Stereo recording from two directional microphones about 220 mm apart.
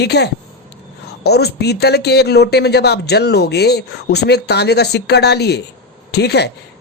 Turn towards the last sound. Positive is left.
turn(degrees=50)  # may be behind; listen again after turning